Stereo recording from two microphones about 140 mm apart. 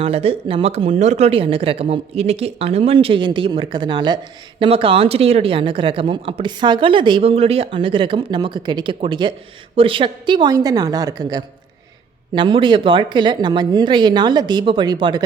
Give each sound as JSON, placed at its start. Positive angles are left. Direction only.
{"t": 0.0, "sound": "a woman's voice", "side_deg": -45}
{"t": 4.7, "sound": "a woman's voice", "side_deg": -40}